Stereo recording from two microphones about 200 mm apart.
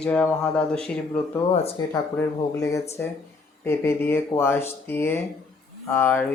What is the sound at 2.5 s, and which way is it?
Speech, 15° left (ahead or behind).